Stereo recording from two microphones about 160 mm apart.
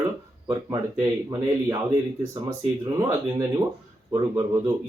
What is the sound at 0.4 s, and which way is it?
Speech, 25° right (ahead or behind).